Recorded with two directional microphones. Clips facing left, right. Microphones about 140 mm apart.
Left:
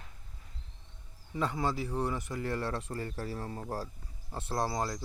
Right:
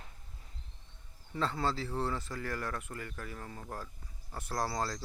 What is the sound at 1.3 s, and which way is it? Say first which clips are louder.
Speech: left 1 dB; 15° left (ahead or behind).